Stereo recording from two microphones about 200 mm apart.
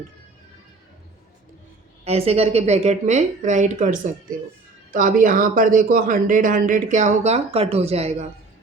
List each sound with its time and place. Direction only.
2.0 s speech: 30° right (ahead or behind)